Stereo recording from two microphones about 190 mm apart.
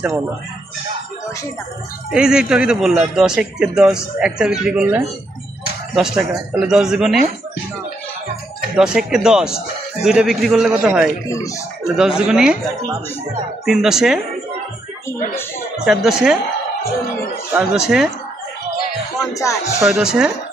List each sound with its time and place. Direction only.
2.0 s a man's voice: 5° right (ahead or behind)
8.7 s a man's voice: 5° right (ahead or behind)
11.2 s speech: 15° left (ahead or behind)
12.0 s a man's voice: 5° right (ahead or behind)
15.8 s a man's voice: centre (ahead or behind)
17.5 s a man's voice: 5° right (ahead or behind)
19.3 s speech: 15° left (ahead or behind)
19.8 s a man's voice: 5° right (ahead or behind)